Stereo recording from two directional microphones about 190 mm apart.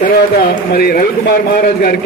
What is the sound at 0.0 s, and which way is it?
A man's voice, 50° left (ahead or behind).